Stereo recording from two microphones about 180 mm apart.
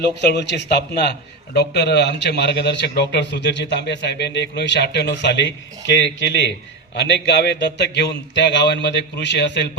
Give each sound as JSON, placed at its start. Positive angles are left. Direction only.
{"t": 0.0, "sound": "a man's voice", "side_deg": 65}
{"t": 6.9, "sound": "a man's voice", "side_deg": 70}